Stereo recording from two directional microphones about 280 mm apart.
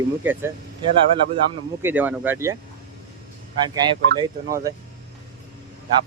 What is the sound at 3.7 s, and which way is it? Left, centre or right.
Speech, centre.